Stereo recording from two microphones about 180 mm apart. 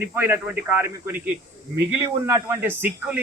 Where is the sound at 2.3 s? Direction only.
15° right (ahead or behind).